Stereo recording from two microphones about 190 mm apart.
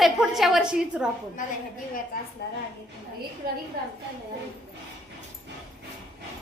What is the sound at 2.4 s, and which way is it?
Speech, 60° left (ahead or behind).